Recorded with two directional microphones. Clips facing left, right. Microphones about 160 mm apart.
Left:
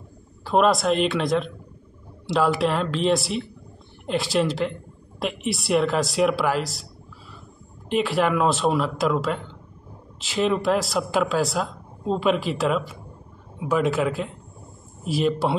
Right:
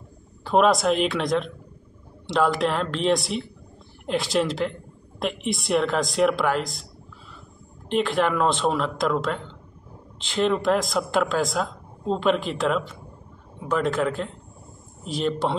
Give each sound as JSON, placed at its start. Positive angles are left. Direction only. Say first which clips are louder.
{"t": 0.4, "sound": "speech", "louder": "even", "side_deg": 0}
{"t": 7.9, "sound": "a man's voice", "louder": "left 1 dB", "side_deg": 5}